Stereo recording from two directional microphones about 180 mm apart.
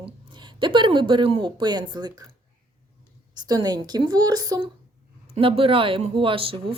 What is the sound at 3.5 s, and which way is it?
Speech, 20° right (ahead or behind).